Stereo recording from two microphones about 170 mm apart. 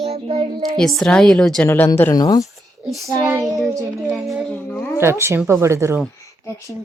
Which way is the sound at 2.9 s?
Centre (ahead or behind).